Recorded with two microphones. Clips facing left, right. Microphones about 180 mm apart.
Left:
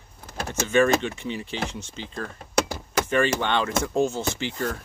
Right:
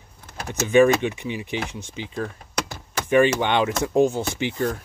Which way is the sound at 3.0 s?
15° right (ahead or behind).